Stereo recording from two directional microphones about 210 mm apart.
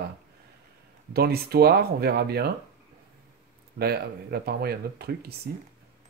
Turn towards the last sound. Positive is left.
turn(degrees=-50)  # may be behind; listen again after turning